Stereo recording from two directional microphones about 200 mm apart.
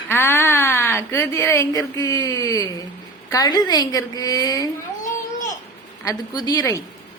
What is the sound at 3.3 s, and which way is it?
Speech, 20° left (ahead or behind).